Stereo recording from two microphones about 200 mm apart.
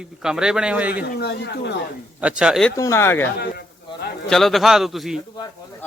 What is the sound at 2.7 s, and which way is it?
Speech, 15° left (ahead or behind).